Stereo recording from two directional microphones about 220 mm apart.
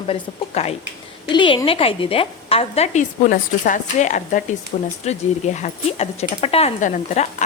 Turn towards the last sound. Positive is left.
turn(degrees=35)  # may be behind; listen again after turning